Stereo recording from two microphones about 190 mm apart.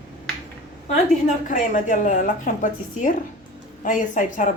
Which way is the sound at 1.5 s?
45° left (ahead or behind).